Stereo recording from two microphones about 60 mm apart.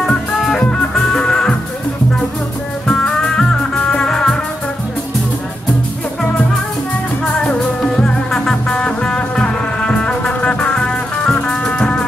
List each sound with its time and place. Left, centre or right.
0.0 s music: centre
2.9 s music: centre
7.4 s music: centre